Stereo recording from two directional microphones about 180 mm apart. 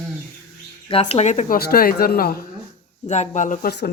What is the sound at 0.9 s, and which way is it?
Speech, 30° left (ahead or behind).